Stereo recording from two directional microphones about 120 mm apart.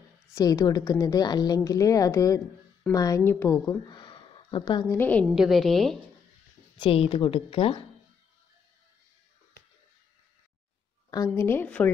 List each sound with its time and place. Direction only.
0.3 s a woman's voice: 30° left (ahead or behind)
3.9 s a sound: 45° left (ahead or behind)
4.9 s a woman's voice: 15° left (ahead or behind)
5.2 s a woman's voice: 5° right (ahead or behind)
6.8 s speech: 45° left (ahead or behind)
11.1 s a woman's voice: 30° left (ahead or behind)
11.4 s a woman's voice: 15° left (ahead or behind)